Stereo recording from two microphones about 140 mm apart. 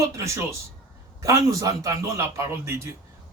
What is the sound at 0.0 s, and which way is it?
A man's voice, 20° right (ahead or behind).